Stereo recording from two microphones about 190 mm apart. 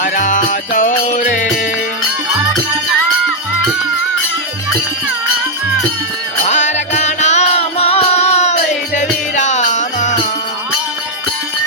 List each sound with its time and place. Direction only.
0.0 s music: 45° left (ahead or behind)
6.4 s music: 40° left (ahead or behind)